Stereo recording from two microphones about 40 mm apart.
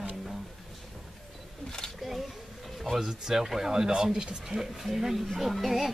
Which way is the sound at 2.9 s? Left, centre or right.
Centre.